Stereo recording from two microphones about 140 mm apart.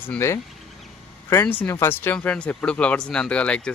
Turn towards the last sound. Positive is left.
turn(degrees=10)  # may be behind; listen again after turning